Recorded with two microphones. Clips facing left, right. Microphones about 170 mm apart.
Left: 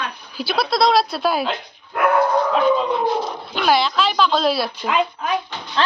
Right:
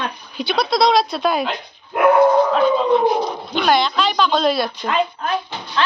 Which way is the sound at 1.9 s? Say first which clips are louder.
Right 4 dB; 20° right (ahead or behind).